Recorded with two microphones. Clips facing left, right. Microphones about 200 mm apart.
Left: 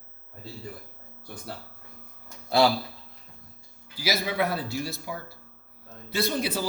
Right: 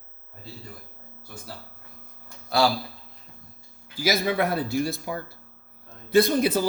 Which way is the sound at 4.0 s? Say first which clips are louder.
Right 4 dB; 50° right (ahead or behind).